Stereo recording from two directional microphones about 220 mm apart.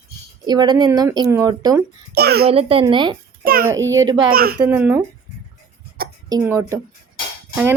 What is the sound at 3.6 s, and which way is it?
Speech, 15° right (ahead or behind).